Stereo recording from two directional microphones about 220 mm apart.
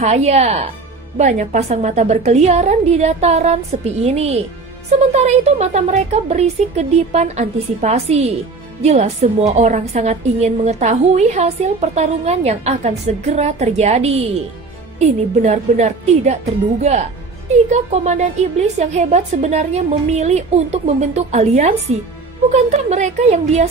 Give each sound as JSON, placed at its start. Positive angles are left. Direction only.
{"t": 0.0, "sound": "a woman's voice", "side_deg": -30}
{"t": 17.6, "sound": "a woman's voice", "side_deg": -30}